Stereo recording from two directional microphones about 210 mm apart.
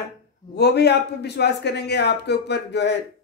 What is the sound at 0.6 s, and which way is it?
Speech, 50° left (ahead or behind).